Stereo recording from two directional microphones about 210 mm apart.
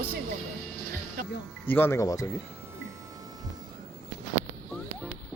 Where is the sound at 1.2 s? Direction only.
40° right (ahead or behind).